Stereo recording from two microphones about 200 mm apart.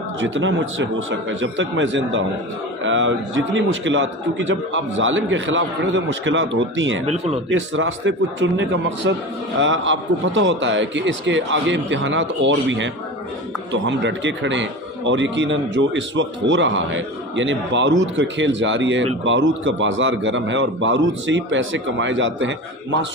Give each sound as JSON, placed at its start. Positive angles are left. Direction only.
{"t": 0.2, "sound": "a man's voice", "side_deg": -70}
{"t": 7.0, "sound": "speech", "side_deg": -30}
{"t": 7.7, "sound": "a man's voice", "side_deg": -70}